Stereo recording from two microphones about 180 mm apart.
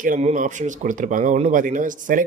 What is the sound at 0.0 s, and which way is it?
Speech, 45° right (ahead or behind).